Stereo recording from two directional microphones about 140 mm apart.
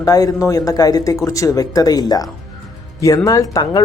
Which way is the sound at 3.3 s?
25° left (ahead or behind).